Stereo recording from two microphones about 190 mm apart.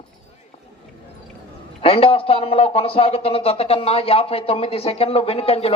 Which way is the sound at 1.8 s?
30° left (ahead or behind).